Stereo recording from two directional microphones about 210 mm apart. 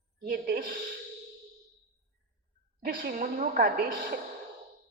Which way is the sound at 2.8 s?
45° right (ahead or behind).